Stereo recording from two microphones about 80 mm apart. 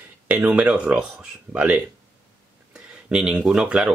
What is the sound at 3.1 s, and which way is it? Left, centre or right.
Speech, centre.